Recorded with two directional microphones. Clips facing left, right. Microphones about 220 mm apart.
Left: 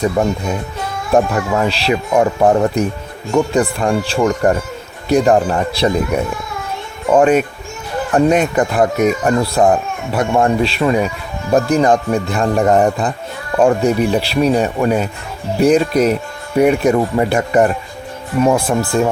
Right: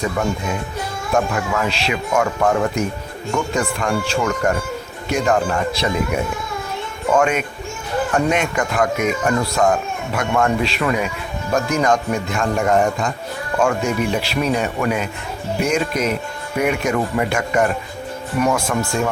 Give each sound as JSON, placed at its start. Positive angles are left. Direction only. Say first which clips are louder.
{"t": 0.0, "sound": "speech", "louder": "left 5 dB", "side_deg": 35}
{"t": 7.2, "sound": "speech", "louder": "left 9 dB", "side_deg": 35}